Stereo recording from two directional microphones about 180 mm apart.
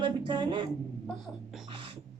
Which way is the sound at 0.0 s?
25° right (ahead or behind).